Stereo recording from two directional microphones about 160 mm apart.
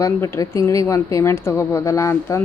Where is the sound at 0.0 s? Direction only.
20° left (ahead or behind).